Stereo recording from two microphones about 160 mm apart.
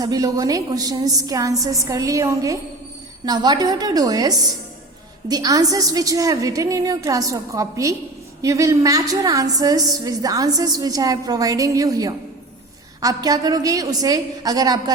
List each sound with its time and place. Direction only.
0.0 s a woman's voice: 25° right (ahead or behind)